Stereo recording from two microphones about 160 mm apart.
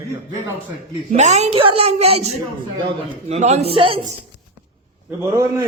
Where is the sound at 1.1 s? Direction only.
45° right (ahead or behind).